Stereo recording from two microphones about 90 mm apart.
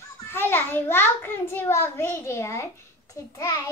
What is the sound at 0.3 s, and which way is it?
A child's voice, 25° left (ahead or behind).